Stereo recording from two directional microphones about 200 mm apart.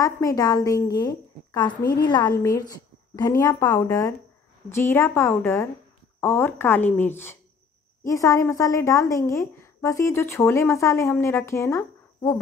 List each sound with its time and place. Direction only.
0.0 s a woman's voice: 15° left (ahead or behind)